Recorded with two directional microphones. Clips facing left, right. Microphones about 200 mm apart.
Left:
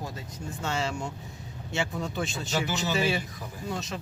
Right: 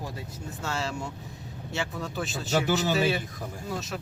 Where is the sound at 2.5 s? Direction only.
45° right (ahead or behind).